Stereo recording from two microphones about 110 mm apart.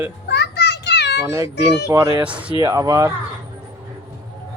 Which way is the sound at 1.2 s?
25° right (ahead or behind).